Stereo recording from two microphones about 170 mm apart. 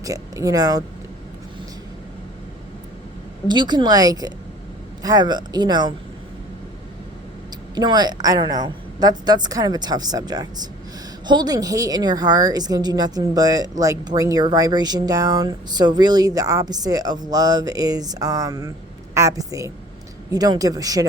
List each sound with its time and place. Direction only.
0.0 s speech: 20° right (ahead or behind)
3.4 s speech: 25° right (ahead or behind)
7.8 s speech: 25° right (ahead or behind)